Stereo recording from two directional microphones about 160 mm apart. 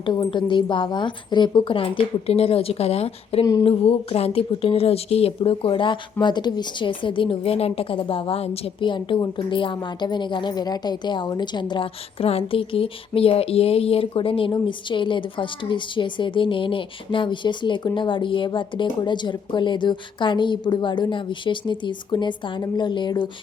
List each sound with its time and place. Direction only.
0.0 s speech: 30° left (ahead or behind)